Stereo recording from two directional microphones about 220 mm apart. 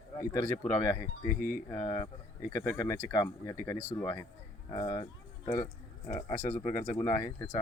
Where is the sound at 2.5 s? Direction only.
15° left (ahead or behind).